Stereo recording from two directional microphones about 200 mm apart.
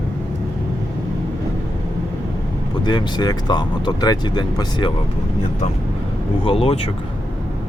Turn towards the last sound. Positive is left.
turn(degrees=30)  # may be behind; listen again after turning